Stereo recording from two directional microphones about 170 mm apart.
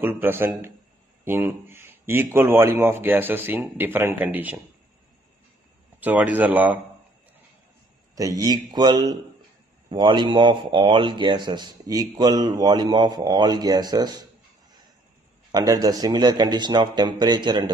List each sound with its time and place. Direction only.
0.0 s a man's voice: 15° right (ahead or behind)
5.9 s a man's voice: 10° right (ahead or behind)
8.2 s a man's voice: 20° right (ahead or behind)
15.5 s a man's voice: 20° right (ahead or behind)